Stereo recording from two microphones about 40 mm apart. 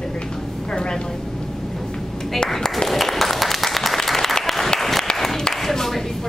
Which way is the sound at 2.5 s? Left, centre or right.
Centre.